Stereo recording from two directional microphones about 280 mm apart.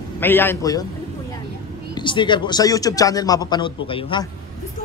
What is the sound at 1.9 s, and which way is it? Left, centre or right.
A man's voice, centre.